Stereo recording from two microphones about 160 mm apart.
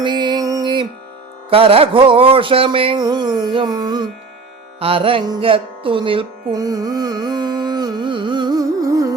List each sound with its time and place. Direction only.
0.0 s music: 30° right (ahead or behind)
1.5 s a sound: 35° right (ahead or behind)
4.8 s music: 35° right (ahead or behind)